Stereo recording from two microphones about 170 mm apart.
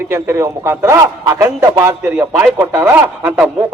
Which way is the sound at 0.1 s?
15° right (ahead or behind).